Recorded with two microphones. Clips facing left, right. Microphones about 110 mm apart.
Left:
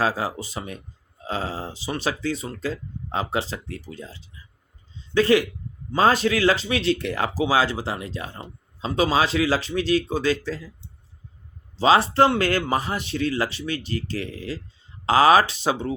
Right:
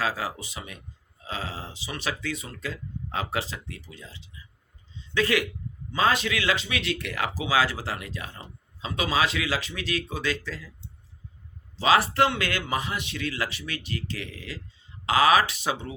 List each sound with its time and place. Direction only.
0.0 s speech: 30° left (ahead or behind)
11.8 s speech: 30° left (ahead or behind)